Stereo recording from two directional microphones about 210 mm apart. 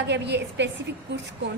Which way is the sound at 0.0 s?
55° right (ahead or behind).